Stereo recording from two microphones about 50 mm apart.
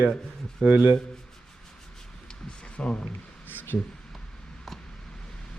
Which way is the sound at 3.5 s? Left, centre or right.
Left.